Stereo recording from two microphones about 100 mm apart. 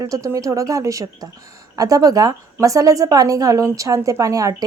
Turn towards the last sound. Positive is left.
turn(degrees=-35)  # may be behind; listen again after turning